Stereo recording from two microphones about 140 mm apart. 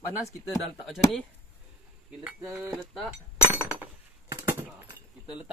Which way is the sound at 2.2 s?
5° right (ahead or behind).